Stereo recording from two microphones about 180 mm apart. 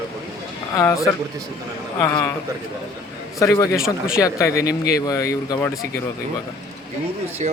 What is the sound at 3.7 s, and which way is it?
Speech, 5° right (ahead or behind).